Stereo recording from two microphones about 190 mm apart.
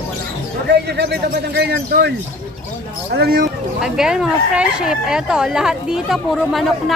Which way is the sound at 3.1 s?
55° right (ahead or behind).